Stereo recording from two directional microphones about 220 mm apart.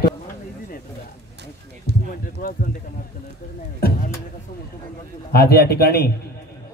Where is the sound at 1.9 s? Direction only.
45° right (ahead or behind).